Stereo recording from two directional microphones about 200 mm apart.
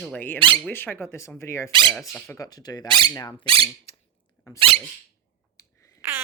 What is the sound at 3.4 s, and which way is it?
Speech, 25° right (ahead or behind).